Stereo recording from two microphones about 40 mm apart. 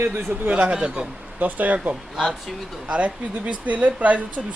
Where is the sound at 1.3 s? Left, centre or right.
Right.